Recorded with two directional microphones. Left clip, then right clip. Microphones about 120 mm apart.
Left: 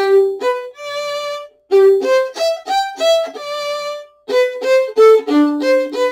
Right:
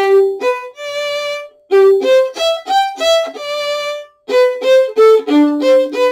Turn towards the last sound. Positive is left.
turn(degrees=-5)  # may be behind; listen again after turning